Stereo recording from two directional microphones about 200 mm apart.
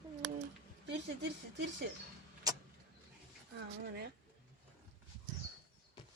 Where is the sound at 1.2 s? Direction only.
60° right (ahead or behind).